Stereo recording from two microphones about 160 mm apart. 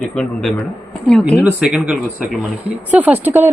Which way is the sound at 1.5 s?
5° right (ahead or behind).